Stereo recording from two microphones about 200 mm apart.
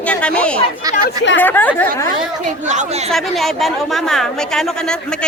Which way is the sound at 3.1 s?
Centre (ahead or behind).